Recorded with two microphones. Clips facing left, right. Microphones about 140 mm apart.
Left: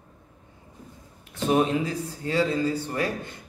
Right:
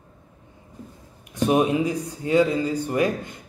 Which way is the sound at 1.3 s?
15° right (ahead or behind).